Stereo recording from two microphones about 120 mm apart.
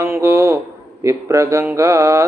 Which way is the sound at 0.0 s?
20° right (ahead or behind).